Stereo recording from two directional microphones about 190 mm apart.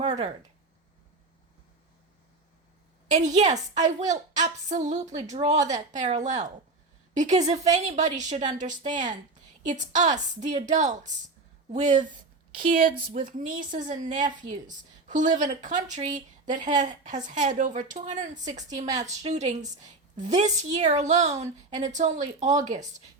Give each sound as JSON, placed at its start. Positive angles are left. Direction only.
{"t": 0.0, "sound": "speech", "side_deg": -35}
{"t": 3.1, "sound": "a woman's voice", "side_deg": -40}